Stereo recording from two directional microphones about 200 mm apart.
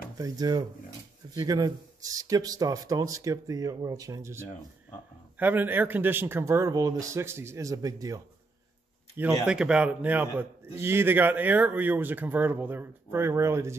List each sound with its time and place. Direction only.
0.2 s speech: 20° right (ahead or behind)